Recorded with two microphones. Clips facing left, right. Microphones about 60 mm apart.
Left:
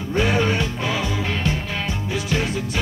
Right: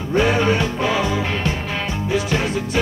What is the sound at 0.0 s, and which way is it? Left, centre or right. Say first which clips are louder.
Music: right 3 dB; right.